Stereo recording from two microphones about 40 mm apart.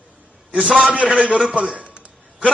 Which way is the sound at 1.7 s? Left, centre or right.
Right.